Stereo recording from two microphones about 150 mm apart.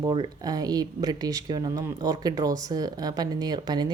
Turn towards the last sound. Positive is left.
turn(degrees=-30)  # may be behind; listen again after turning